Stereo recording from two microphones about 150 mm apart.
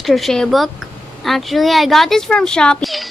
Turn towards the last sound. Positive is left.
turn(degrees=0)  # may be behind; listen again after turning